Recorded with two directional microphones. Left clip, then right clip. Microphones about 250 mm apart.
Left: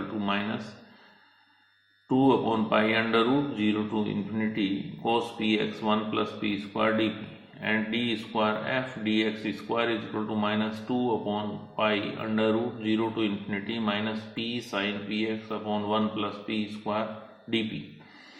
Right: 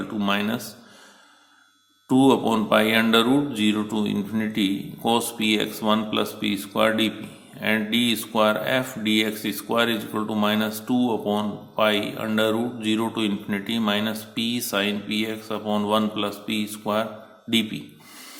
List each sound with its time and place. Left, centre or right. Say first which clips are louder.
0.2 s speech: right 6 dB; right
2.0 s speech: right 5 dB; right